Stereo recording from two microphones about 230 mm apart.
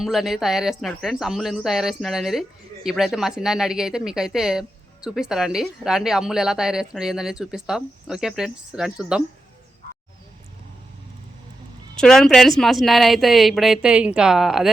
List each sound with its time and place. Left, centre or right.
0.0 s a woman's voice: centre
11.9 s a woman's voice: centre